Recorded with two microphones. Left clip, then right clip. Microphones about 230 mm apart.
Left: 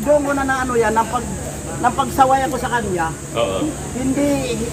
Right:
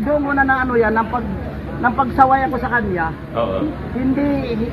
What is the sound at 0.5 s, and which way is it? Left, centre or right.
Speech, left.